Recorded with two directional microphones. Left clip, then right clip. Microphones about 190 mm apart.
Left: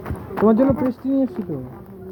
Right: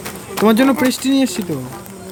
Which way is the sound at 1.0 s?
90° right.